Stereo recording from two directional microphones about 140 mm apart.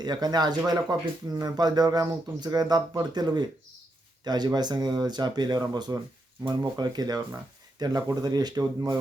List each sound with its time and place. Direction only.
0.0 s speech: 30° right (ahead or behind)